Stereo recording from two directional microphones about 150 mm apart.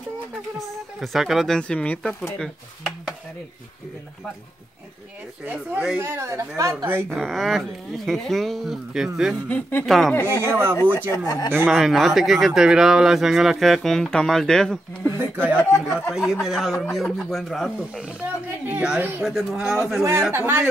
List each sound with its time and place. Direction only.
0.6 s speech: centre (ahead or behind)
5.4 s speech: 10° right (ahead or behind)
7.1 s speech: centre (ahead or behind)
9.5 s speech: 15° left (ahead or behind)
9.8 s speech: centre (ahead or behind)
10.2 s speech: 15° right (ahead or behind)
11.0 s speech: 20° left (ahead or behind)
11.6 s speech: centre (ahead or behind)
15.5 s speech: 15° left (ahead or behind)
16.1 s speech: centre (ahead or behind)
20.1 s speech: 15° right (ahead or behind)